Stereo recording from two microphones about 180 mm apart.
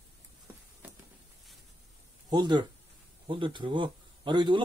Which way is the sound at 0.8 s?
10° right (ahead or behind).